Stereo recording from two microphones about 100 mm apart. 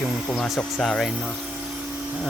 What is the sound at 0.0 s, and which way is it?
Tools, 10° left (ahead or behind).